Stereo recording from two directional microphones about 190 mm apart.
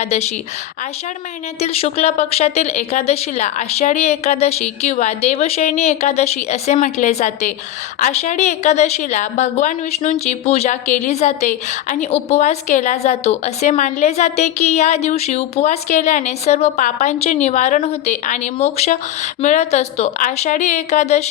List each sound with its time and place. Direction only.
0.0 s a woman's voice: 35° left (ahead or behind)
1.5 s a woman's voice: 30° left (ahead or behind)